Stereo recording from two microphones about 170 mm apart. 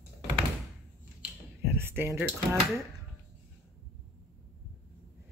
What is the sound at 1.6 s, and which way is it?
Speech, 15° right (ahead or behind).